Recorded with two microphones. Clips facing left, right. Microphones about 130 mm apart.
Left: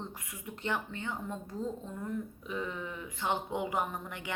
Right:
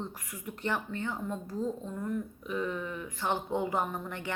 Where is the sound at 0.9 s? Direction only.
20° left (ahead or behind).